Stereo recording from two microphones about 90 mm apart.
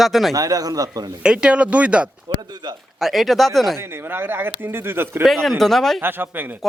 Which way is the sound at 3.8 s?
25° right (ahead or behind).